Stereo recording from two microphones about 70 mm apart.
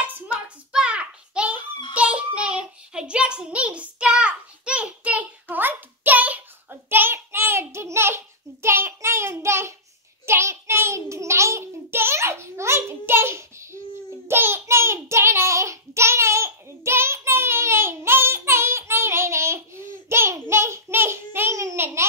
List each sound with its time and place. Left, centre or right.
0.0 s hands: right
0.7 s a sound: centre
2.0 s child singing: centre
6.7 s child singing: right
21.7 s babbling: right